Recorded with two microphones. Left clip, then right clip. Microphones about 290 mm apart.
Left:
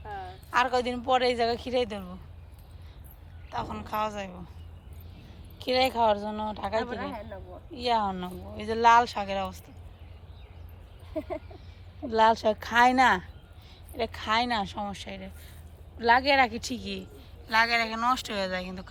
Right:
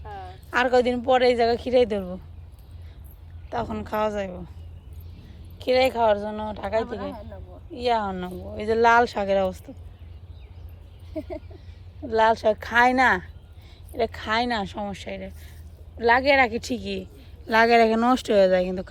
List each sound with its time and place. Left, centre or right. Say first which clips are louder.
0.0 s a sound: even; left
0.5 s speech: right 5 dB; centre
3.5 s speech: right 5 dB; centre
6.8 s speech: right 2 dB; left
7.7 s speech: right 3 dB; centre
11.1 s speech: even; left
12.0 s speech: right 3 dB; centre